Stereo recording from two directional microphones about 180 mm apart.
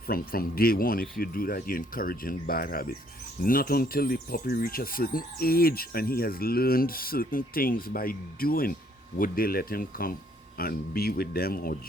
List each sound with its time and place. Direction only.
0.1 s speech: 55° left (ahead or behind)